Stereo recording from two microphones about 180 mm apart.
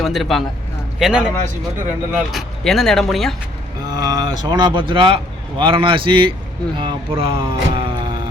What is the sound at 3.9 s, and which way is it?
Speech, 20° right (ahead or behind).